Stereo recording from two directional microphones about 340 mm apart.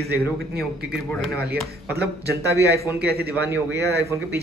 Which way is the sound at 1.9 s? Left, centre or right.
Right.